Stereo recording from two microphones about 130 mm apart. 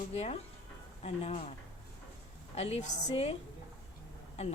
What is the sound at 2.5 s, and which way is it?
Speech, 55° left (ahead or behind).